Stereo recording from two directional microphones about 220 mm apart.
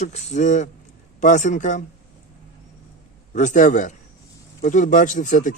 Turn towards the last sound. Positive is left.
turn(degrees=35)  # may be behind; listen again after turning